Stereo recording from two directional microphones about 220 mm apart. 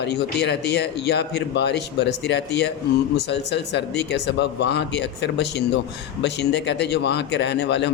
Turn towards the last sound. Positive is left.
turn(degrees=50)  # may be behind; listen again after turning